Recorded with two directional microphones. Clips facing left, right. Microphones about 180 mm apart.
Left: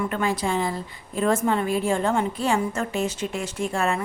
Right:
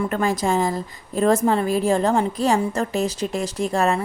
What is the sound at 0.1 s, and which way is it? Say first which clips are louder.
A woman's voice: right 4 dB; 45° right (ahead or behind).